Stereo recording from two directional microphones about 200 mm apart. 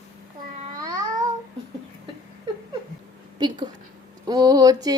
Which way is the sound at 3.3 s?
20° right (ahead or behind).